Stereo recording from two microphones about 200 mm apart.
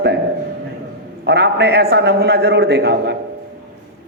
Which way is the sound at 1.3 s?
55° right (ahead or behind).